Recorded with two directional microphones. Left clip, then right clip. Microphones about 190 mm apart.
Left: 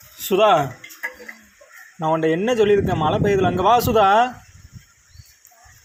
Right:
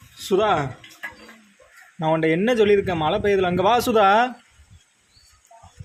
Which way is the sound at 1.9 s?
20° right (ahead or behind).